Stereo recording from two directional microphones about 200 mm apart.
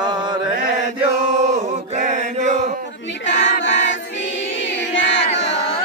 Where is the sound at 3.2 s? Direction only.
65° left (ahead or behind).